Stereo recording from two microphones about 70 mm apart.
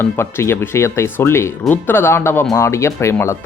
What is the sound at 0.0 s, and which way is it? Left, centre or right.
Speech, left.